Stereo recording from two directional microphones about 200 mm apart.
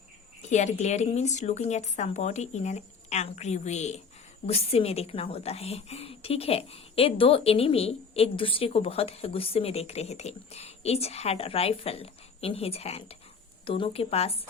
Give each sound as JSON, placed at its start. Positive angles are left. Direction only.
{"t": 0.4, "sound": "a woman's voice", "side_deg": 35}